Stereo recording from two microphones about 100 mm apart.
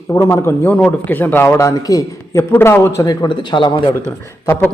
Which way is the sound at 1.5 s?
35° left (ahead or behind).